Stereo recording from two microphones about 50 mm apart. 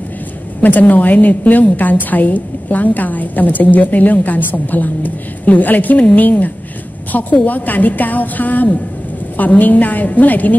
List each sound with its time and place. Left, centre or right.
0.6 s a woman's voice: left